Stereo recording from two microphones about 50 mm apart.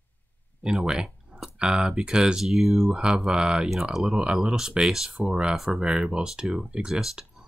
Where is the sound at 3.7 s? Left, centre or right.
Centre.